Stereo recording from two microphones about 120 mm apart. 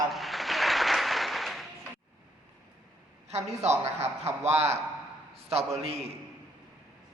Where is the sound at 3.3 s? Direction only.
65° right (ahead or behind).